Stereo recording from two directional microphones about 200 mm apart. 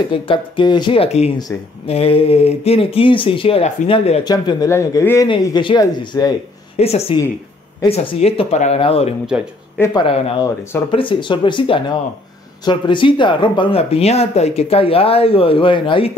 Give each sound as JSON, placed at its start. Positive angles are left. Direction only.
{"t": 0.1, "sound": "speech", "side_deg": 25}
{"t": 4.2, "sound": "speech", "side_deg": 20}
{"t": 6.8, "sound": "speech", "side_deg": 30}
{"t": 9.3, "sound": "speech", "side_deg": -5}
{"t": 9.8, "sound": "speech", "side_deg": 25}
{"t": 10.4, "sound": "speech", "side_deg": 15}
{"t": 10.9, "sound": "speech", "side_deg": 25}